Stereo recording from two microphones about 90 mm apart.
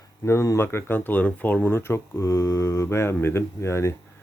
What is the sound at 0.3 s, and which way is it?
Speech, 30° left (ahead or behind).